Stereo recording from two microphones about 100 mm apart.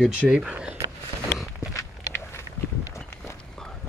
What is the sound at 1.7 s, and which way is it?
Walk, 25° left (ahead or behind).